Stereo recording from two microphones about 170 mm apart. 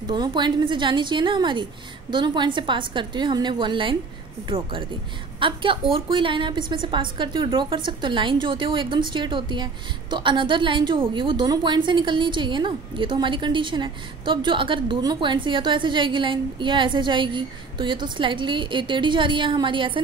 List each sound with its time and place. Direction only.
0.0 s a woman's voice: 25° right (ahead or behind)